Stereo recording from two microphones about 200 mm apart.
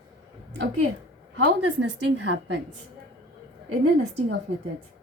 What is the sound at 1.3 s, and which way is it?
Speech, 60° right (ahead or behind).